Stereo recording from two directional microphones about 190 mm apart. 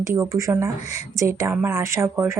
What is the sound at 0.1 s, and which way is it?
Speech, 15° right (ahead or behind).